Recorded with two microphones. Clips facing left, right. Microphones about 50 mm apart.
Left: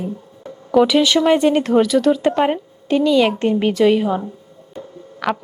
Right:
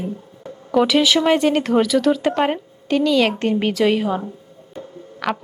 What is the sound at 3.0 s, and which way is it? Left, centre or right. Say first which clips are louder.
Speech: left 2 dB; centre.